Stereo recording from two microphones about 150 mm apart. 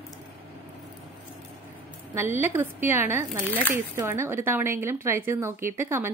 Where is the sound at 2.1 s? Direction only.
15° right (ahead or behind).